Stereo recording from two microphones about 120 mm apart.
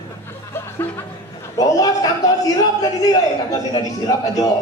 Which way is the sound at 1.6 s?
30° left (ahead or behind).